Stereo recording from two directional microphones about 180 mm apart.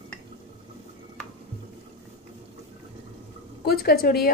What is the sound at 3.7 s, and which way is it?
Speech, 55° left (ahead or behind).